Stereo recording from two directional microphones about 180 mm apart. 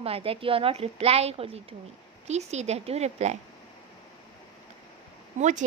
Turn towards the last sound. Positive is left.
turn(degrees=-40)  # may be behind; listen again after turning